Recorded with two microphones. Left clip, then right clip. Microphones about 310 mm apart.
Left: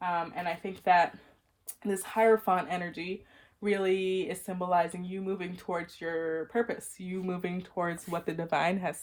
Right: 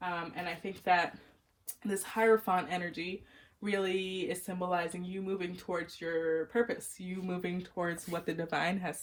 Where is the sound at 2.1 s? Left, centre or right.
Left.